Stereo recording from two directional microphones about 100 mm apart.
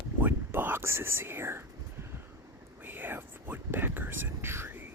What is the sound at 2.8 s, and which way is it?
Whispering, 20° right (ahead or behind).